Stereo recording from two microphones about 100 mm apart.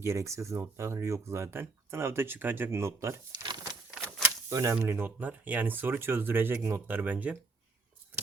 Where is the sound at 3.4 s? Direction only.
45° right (ahead or behind).